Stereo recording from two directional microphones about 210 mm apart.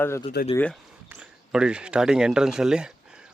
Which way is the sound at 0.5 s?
5° left (ahead or behind).